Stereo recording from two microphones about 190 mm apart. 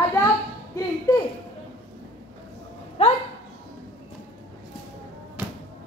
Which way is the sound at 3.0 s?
35° left (ahead or behind).